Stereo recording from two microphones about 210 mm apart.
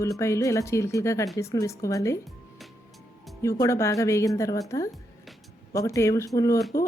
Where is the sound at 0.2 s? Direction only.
15° left (ahead or behind).